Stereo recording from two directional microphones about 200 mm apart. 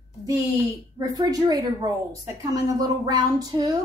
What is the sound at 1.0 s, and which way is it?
A woman's voice, 15° right (ahead or behind).